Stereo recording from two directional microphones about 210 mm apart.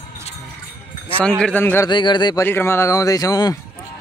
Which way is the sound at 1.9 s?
20° left (ahead or behind).